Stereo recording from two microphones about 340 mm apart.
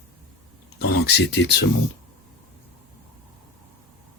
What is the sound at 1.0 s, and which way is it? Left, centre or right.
Speech, left.